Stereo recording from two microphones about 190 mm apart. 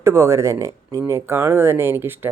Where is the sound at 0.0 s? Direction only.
15° right (ahead or behind).